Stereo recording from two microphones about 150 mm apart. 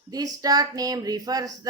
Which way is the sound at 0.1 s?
25° right (ahead or behind).